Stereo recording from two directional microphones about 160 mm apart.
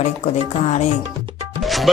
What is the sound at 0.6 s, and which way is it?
Music, 40° left (ahead or behind).